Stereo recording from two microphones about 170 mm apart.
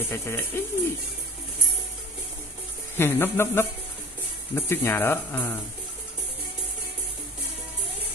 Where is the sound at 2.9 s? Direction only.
15° left (ahead or behind).